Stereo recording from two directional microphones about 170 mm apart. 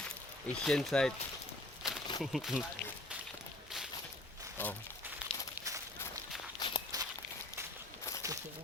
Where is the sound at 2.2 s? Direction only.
Centre (ahead or behind).